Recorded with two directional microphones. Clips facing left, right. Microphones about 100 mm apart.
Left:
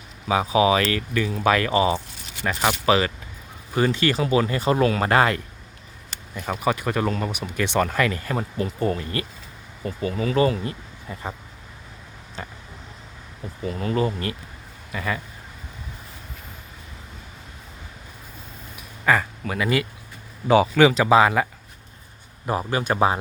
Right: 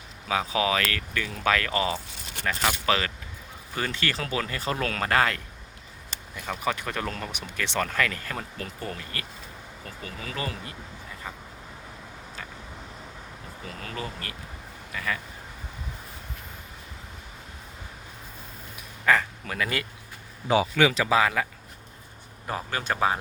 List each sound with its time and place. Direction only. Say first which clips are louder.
0.3 s speech: left 7 dB; 20° left (ahead or behind)
12.4 s vehicle: left 6 dB; 30° left (ahead or behind)
13.7 s speech: left 12 dB; 30° left (ahead or behind)
19.0 s speech: left 2 dB; 10° left (ahead or behind)
20.7 s speech: left 7 dB; 30° left (ahead or behind)
22.4 s speech: left 6 dB; 15° left (ahead or behind)